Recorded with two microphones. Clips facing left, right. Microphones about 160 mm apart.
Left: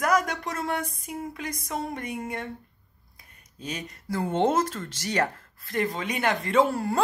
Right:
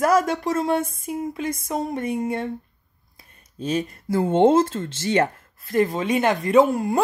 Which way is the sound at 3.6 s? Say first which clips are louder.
Right 11 dB; 25° right (ahead or behind).